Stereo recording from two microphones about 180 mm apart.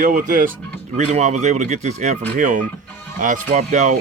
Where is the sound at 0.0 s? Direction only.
50° right (ahead or behind).